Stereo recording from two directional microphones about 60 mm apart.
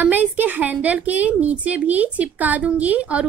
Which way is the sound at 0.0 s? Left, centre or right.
Right.